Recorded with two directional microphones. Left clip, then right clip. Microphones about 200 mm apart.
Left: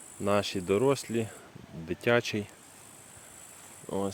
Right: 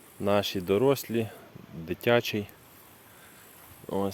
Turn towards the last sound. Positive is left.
turn(degrees=-25)  # may be behind; listen again after turning